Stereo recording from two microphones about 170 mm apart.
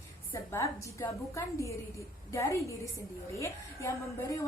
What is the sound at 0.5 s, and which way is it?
A woman's voice, 15° left (ahead or behind).